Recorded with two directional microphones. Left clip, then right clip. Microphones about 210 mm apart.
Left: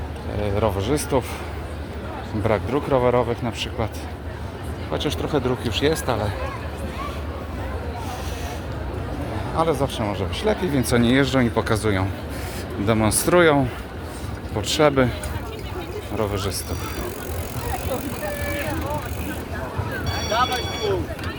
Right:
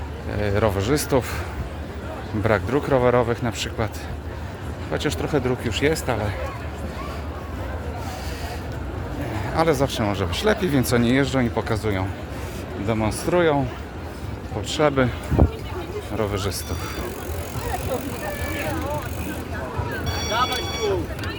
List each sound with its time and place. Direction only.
0.4 s speech: 15° right (ahead or behind)
2.4 s speech: 15° right (ahead or behind)
4.9 s speech: 10° right (ahead or behind)
9.6 s a man's voice: 20° right (ahead or behind); by 13.7 s 10° left (ahead or behind)
14.7 s speech: 5° left (ahead or behind)
16.1 s speech: 10° right (ahead or behind)